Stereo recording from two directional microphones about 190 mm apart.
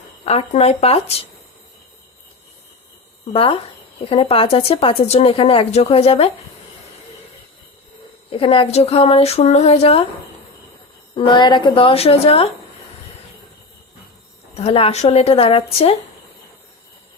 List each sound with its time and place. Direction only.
0.3 s speech: 35° left (ahead or behind)
3.3 s a woman's voice: 30° left (ahead or behind)
8.3 s speech: 30° left (ahead or behind)
11.1 s a woman's voice: 25° left (ahead or behind)
14.5 s speech: 30° left (ahead or behind)